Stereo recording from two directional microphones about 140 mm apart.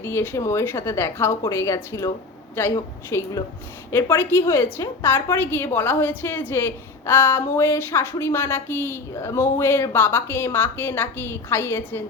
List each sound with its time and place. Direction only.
0.0 s a woman's voice: 15° left (ahead or behind)